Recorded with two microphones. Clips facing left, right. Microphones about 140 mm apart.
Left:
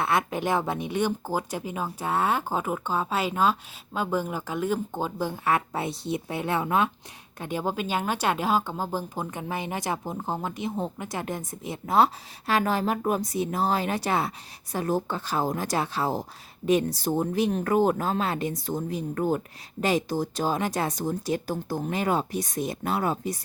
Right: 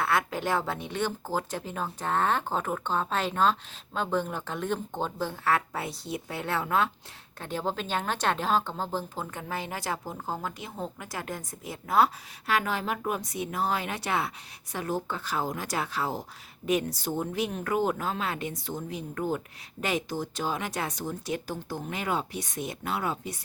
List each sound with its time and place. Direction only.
0.0 s a woman's voice: 20° left (ahead or behind); by 23.4 s 40° left (ahead or behind)